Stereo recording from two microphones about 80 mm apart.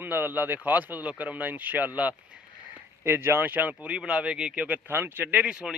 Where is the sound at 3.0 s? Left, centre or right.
Right.